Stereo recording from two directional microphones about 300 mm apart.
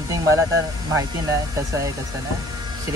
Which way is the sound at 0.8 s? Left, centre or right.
Centre.